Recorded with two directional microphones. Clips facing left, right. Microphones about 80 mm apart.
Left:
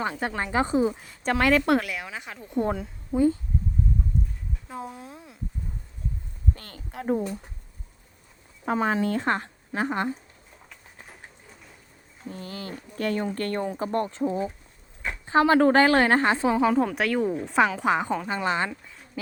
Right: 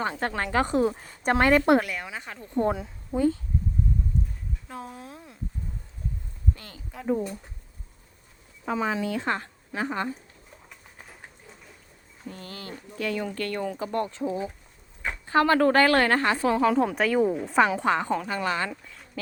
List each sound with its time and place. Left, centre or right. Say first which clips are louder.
0.0 s speech: even; centre
0.8 s a woman's voice: even; centre
1.3 s a woman's voice: right 1 dB; centre
1.5 s a woman's voice: right 2 dB; centre
4.7 s speech: left 3 dB; centre
6.6 s speech: left 3 dB; left
8.6 s speech: left 3 dB; left
12.3 s a woman's voice: left 4 dB; left
12.7 s speech: left 2 dB; left
15.3 s a woman's voice: left 2 dB; left
16.7 s a woman's voice: right 1 dB; centre
17.7 s speech: even; centre
18.4 s a woman's voice: left 2 dB; left